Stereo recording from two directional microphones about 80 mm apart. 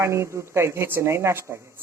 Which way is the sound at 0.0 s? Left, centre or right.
Right.